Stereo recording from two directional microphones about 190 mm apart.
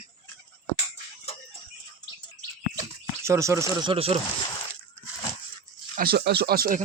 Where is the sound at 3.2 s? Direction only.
15° right (ahead or behind).